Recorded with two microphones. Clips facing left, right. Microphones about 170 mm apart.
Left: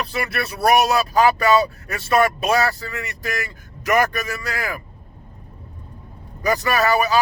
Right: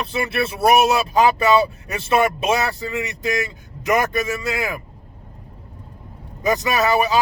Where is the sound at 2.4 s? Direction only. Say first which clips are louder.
Left 1 dB; 20° right (ahead or behind).